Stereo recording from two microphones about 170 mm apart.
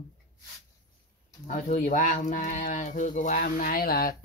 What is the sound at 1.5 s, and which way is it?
Speech, 50° left (ahead or behind).